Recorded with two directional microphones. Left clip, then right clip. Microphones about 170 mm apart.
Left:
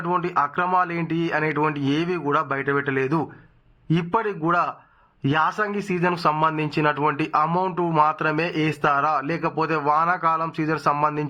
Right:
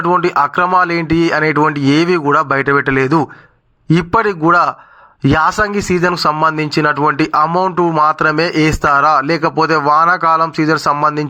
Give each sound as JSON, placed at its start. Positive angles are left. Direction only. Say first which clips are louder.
{"t": 0.0, "sound": "speech", "louder": "right 10 dB", "side_deg": -30}